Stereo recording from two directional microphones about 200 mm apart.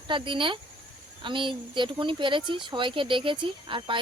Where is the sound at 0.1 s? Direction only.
25° right (ahead or behind).